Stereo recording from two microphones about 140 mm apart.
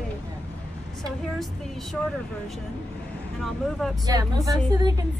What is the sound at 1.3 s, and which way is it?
Speech, centre (ahead or behind).